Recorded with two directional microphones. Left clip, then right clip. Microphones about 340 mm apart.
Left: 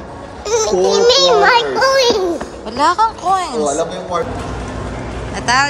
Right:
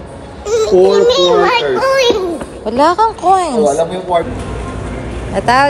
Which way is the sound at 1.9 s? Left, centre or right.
Left.